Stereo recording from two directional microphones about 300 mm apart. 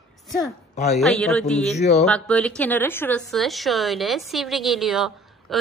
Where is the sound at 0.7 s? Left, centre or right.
Left.